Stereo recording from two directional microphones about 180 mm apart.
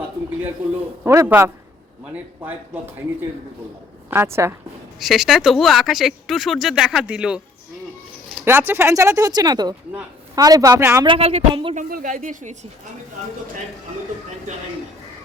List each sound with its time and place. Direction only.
1.0 s speech: 15° right (ahead or behind)
4.1 s speech: 15° right (ahead or behind)
4.9 s speech: centre (ahead or behind)
8.4 s a man's voice: 10° right (ahead or behind)
11.0 s speech: 30° right (ahead or behind)
11.7 s speech: 50° right (ahead or behind)